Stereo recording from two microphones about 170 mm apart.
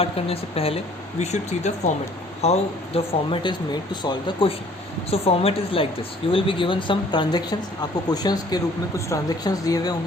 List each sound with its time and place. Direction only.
0.0 s speech: 35° left (ahead or behind)